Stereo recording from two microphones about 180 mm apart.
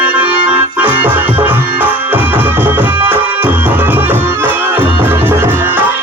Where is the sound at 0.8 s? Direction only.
10° right (ahead or behind).